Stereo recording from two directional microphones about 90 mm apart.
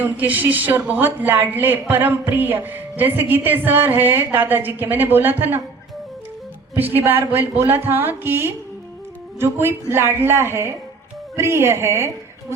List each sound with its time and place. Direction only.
0.0 s a woman's voice: 20° right (ahead or behind)
6.7 s a woman's voice: 20° right (ahead or behind)